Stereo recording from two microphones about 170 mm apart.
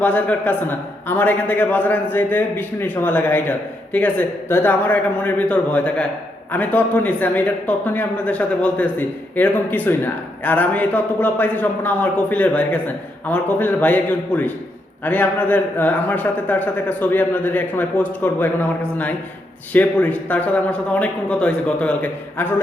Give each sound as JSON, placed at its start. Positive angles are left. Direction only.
{"t": 0.0, "sound": "a man's voice", "side_deg": 10}